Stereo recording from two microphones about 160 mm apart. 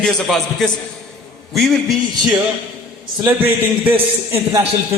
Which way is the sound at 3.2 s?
10° right (ahead or behind).